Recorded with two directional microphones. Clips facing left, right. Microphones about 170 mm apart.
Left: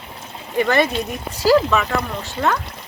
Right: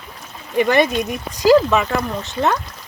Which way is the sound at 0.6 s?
15° right (ahead or behind).